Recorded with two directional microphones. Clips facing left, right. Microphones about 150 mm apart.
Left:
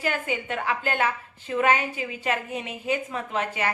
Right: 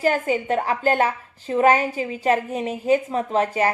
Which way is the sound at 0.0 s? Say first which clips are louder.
Right 7 dB; 40° right (ahead or behind).